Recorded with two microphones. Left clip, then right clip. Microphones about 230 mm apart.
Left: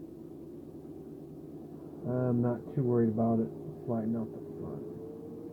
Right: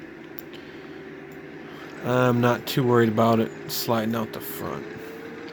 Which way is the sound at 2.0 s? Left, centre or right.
Right.